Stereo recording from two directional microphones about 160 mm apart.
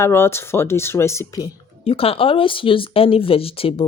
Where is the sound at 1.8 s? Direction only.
35° left (ahead or behind).